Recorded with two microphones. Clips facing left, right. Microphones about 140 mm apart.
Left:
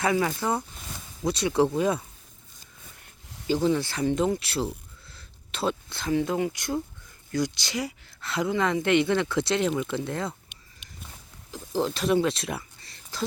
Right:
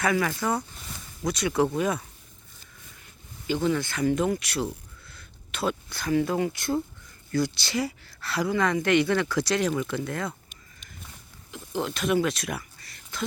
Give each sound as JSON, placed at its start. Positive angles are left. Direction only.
{"t": 0.0, "sound": "speech", "side_deg": 25}
{"t": 3.7, "sound": "speech", "side_deg": 30}
{"t": 9.6, "sound": "speech", "side_deg": 5}
{"t": 10.0, "sound": "speech", "side_deg": 25}
{"t": 11.5, "sound": "speech", "side_deg": 35}